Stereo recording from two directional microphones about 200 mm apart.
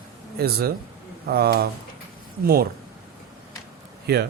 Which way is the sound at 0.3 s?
50° right (ahead or behind).